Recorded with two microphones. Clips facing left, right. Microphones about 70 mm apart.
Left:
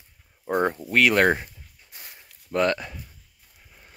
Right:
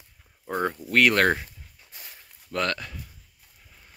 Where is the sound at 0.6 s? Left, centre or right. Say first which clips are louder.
Left 3 dB; left.